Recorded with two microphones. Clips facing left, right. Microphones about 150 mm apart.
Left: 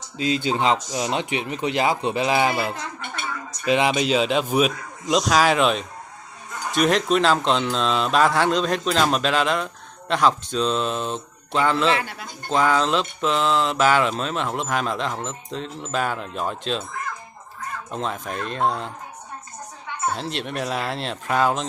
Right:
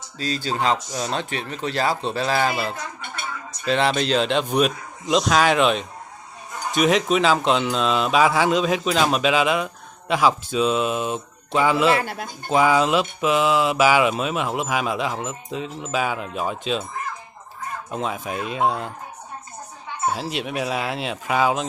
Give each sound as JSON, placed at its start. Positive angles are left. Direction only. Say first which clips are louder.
{"t": 0.2, "sound": "speech", "louder": "left 2 dB", "side_deg": 20}
{"t": 12.0, "sound": "speech", "louder": "right 4 dB", "side_deg": -45}
{"t": 12.4, "sound": "speech", "louder": "right 2 dB", "side_deg": -10}
{"t": 17.9, "sound": "speech", "louder": "right 1 dB", "side_deg": -5}
{"t": 20.1, "sound": "speech", "louder": "right 2 dB", "side_deg": -5}